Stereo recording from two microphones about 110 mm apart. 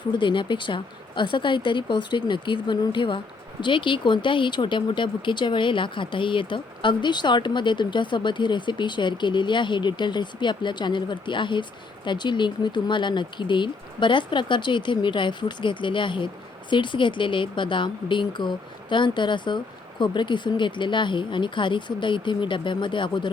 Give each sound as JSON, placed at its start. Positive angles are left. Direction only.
{"t": 0.2, "sound": "speech", "side_deg": 45}